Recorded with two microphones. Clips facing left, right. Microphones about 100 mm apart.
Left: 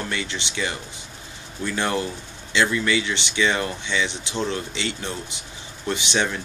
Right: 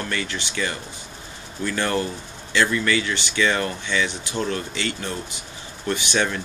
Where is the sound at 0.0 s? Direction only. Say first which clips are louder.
Right 1 dB; 20° left (ahead or behind).